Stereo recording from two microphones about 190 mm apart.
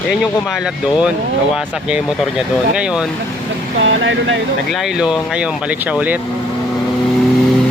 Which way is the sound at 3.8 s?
80° right.